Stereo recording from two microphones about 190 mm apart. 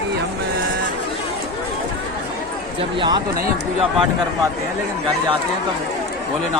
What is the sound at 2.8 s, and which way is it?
Speech, 25° right (ahead or behind).